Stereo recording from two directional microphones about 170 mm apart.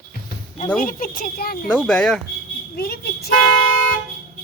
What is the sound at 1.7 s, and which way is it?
Speech, 5° left (ahead or behind).